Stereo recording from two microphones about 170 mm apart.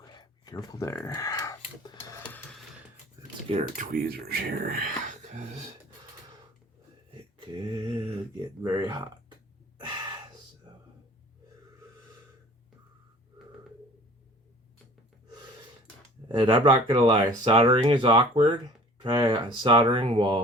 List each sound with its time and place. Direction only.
0.1 s a sound: 25° left (ahead or behind)
3.5 s speech: 40° right (ahead or behind)
3.9 s speech: 65° right (ahead or behind); by 5.6 s 45° right (ahead or behind)
7.6 s speech: 25° right (ahead or behind)
16.3 s speech: 30° right (ahead or behind)